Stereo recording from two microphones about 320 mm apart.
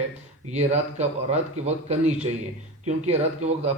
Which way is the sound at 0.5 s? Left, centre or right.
Right.